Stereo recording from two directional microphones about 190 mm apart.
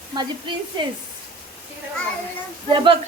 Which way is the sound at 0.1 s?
25° right (ahead or behind).